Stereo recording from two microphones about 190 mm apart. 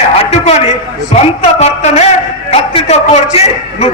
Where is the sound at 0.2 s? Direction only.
35° left (ahead or behind).